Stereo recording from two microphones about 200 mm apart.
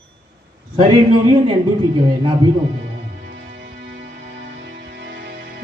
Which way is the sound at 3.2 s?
65° right (ahead or behind).